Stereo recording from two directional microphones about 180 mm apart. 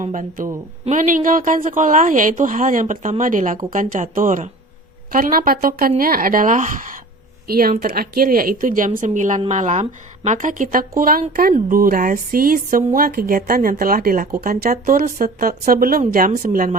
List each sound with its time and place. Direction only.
0.0 s speech: 45° right (ahead or behind)